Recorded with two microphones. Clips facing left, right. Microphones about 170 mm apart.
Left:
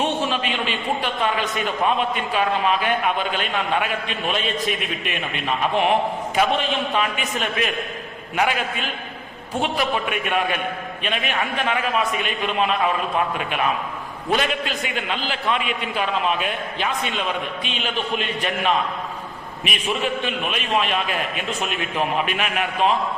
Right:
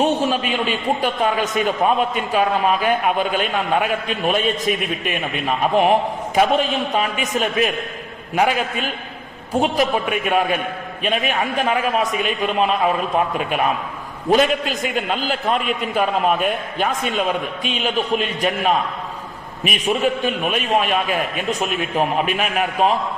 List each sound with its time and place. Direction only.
0.0 s a man's voice: 40° right (ahead or behind)
14.9 s a man's voice: 45° right (ahead or behind)